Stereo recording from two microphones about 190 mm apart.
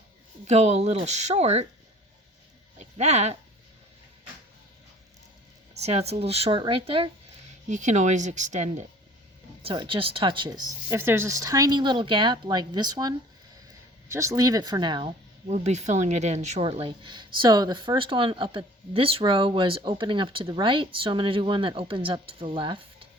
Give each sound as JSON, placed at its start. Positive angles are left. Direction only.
{"t": 0.4, "sound": "speech", "side_deg": -35}
{"t": 2.7, "sound": "speech", "side_deg": -35}
{"t": 5.7, "sound": "speech", "side_deg": -35}
{"t": 7.7, "sound": "speech", "side_deg": -40}
{"t": 9.6, "sound": "speech", "side_deg": -25}